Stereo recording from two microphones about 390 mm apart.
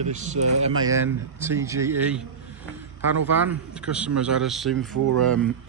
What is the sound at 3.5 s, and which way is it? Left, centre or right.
Speech, centre.